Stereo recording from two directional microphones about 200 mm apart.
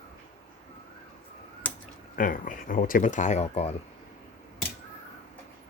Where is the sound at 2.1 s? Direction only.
45° left (ahead or behind).